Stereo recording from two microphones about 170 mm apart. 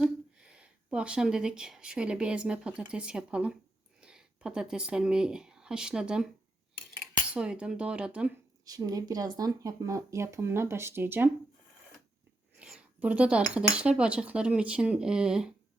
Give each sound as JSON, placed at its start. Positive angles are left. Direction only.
{"t": 0.0, "sound": "speech", "side_deg": -5}
{"t": 7.3, "sound": "cutlery", "side_deg": -5}
{"t": 8.6, "sound": "speech", "side_deg": -20}
{"t": 12.5, "sound": "cutlery", "side_deg": -5}